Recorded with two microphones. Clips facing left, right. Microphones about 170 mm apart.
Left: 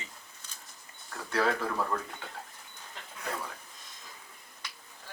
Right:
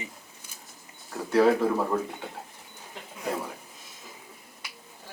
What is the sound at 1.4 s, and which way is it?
Speech, 15° right (ahead or behind).